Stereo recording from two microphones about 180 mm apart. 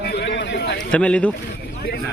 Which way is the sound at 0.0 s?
65° left (ahead or behind).